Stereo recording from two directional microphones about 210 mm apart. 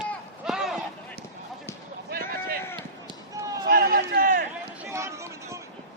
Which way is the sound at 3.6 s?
45° right (ahead or behind).